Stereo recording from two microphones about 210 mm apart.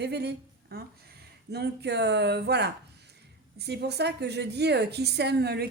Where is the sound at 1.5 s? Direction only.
50° right (ahead or behind).